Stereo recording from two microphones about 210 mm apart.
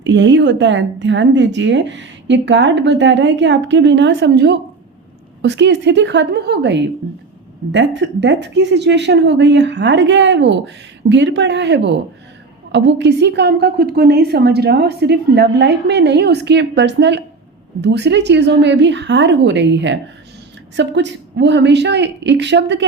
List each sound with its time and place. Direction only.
0.0 s a woman's voice: 60° right (ahead or behind)